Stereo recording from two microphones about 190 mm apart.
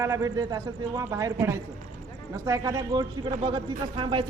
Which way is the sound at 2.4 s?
20° right (ahead or behind).